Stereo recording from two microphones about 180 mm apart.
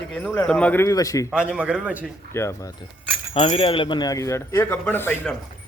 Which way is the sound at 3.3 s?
35° left (ahead or behind).